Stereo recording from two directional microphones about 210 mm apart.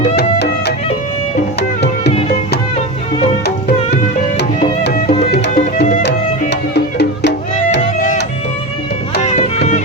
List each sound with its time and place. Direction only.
0.2 s music: 50° left (ahead or behind)
4.4 s music: 45° left (ahead or behind)
7.8 s music: 35° left (ahead or behind)
9.2 s music: 35° left (ahead or behind)